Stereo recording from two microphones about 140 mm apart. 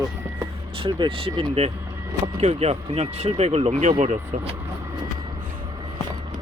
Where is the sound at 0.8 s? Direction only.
35° right (ahead or behind); by 4.5 s 50° right (ahead or behind).